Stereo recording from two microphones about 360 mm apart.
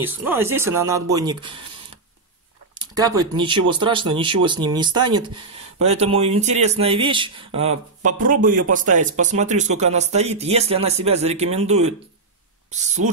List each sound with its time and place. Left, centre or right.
0.0 s speech: centre
2.8 s speech: centre